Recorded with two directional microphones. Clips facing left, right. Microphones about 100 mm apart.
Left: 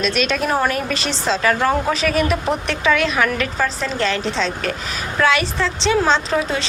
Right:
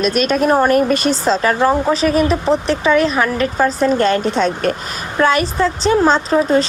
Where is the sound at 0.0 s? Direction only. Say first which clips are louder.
Right 5 dB; 45° right (ahead or behind).